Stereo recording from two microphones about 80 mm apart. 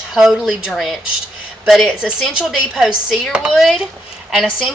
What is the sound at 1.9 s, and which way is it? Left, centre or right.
A woman's voice, centre.